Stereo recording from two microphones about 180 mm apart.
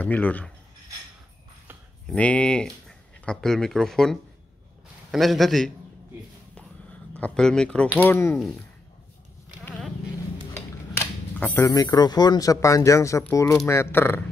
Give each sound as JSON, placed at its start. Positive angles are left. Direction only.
{"t": 0.0, "sound": "a man's voice", "side_deg": 10}
{"t": 2.0, "sound": "a man's voice", "side_deg": 5}
{"t": 7.2, "sound": "a man's voice", "side_deg": 5}
{"t": 9.7, "sound": "vehicle", "side_deg": 10}
{"t": 10.5, "sound": "a man's voice", "side_deg": 10}